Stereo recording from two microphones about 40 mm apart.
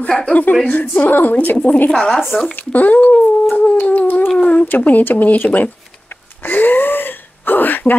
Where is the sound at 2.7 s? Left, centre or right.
Left.